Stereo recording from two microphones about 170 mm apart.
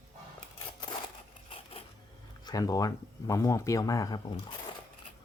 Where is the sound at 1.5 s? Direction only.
35° left (ahead or behind).